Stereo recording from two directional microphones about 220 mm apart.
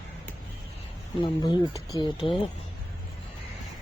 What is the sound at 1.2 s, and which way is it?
Speech, 20° left (ahead or behind).